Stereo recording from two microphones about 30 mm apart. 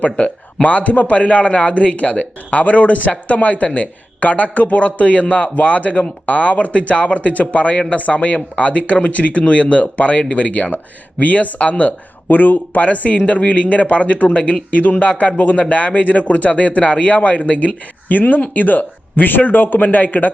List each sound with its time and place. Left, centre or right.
0.2 s a man's voice: left
9.5 s a man's voice: left
12.3 s speech: left
12.8 s a man's voice: left
14.7 s a man's voice: left
18.1 s speech: left